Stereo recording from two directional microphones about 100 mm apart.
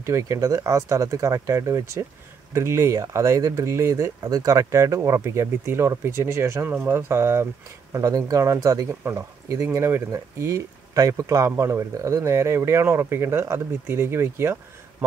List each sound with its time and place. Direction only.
0.0 s speech: 30° right (ahead or behind)